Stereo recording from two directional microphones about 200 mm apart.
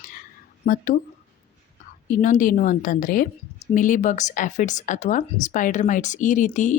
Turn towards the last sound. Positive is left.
turn(degrees=40)  # may be behind; listen again after turning